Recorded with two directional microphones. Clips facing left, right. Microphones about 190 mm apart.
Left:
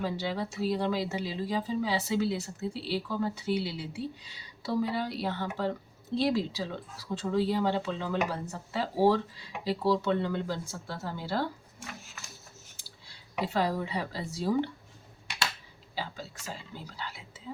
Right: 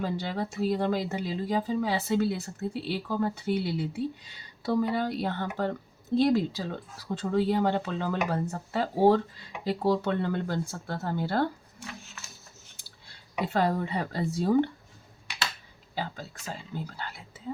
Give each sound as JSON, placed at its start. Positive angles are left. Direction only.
{"t": 0.0, "sound": "speech", "side_deg": -50}
{"t": 12.7, "sound": "speech", "side_deg": -55}
{"t": 16.0, "sound": "speech", "side_deg": -50}